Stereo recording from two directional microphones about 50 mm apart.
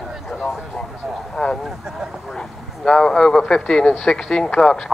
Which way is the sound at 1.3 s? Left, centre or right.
Centre.